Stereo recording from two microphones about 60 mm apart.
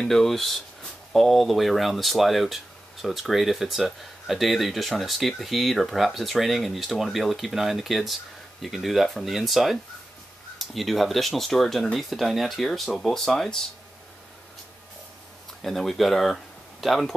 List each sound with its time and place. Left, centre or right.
0.0 s speech: centre
15.6 s speech: centre